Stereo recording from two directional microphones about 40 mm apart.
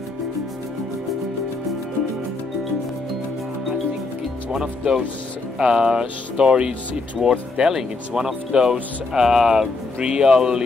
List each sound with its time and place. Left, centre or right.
4.5 s speech: centre
9.9 s speech: right